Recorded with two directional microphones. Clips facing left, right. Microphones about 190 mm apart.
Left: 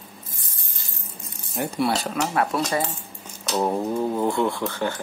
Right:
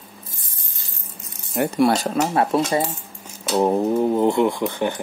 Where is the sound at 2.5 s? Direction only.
30° right (ahead or behind).